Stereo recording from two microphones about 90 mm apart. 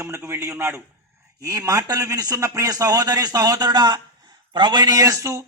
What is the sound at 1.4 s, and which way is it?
A man's voice, 40° right (ahead or behind).